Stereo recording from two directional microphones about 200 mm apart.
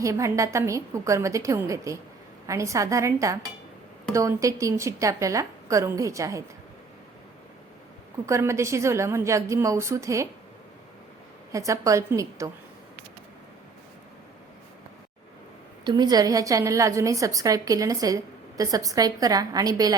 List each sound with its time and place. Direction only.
0.0 s a woman's voice: 15° right (ahead or behind)
8.3 s a woman's voice: 15° right (ahead or behind)
11.5 s a woman's voice: 15° right (ahead or behind)
15.8 s a woman's voice: 20° right (ahead or behind)